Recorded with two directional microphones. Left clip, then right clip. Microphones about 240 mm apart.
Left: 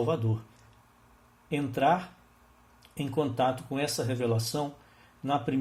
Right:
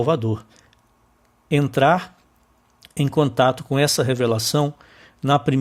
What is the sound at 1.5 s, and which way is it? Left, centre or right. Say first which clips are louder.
Speech: right 9 dB; right.